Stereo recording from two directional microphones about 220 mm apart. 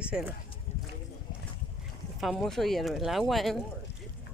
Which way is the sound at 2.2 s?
Centre (ahead or behind).